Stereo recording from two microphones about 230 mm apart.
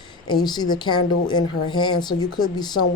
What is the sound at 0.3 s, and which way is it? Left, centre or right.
A woman's voice, centre.